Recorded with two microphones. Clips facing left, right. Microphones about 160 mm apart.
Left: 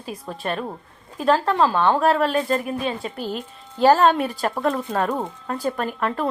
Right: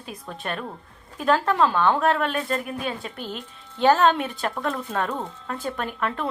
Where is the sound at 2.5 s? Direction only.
20° left (ahead or behind).